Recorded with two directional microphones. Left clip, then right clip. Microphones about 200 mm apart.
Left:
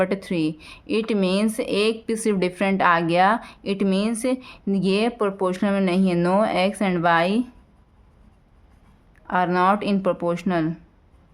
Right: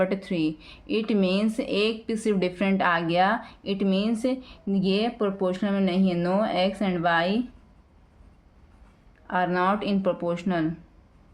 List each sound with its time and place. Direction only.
0.0 s speech: 30° left (ahead or behind)
9.2 s speech: 30° left (ahead or behind)